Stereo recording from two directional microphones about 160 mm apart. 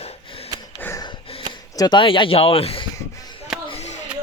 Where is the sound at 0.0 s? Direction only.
40° left (ahead or behind).